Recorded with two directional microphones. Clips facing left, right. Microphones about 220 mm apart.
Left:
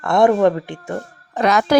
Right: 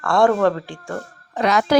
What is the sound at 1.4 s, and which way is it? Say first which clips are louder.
Speech: left 2 dB; 50° left (ahead or behind).